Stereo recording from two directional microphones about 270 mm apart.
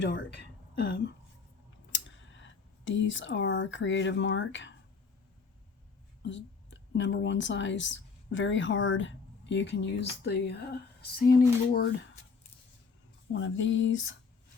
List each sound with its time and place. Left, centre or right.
0.0 s speech: left
6.2 s speech: left
13.3 s a sound: left